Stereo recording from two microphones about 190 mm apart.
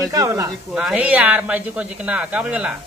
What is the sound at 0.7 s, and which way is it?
Speech, 5° right (ahead or behind).